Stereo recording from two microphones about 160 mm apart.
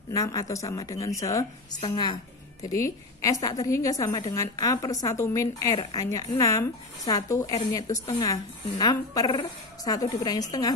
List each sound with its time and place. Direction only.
0.1 s a woman's voice: 20° left (ahead or behind)